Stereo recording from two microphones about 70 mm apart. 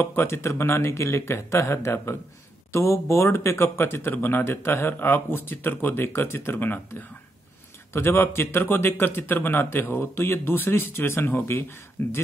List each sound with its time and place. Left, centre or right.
0.0 s speech: left